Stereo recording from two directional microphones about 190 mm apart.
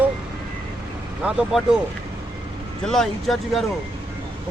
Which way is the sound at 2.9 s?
Centre (ahead or behind).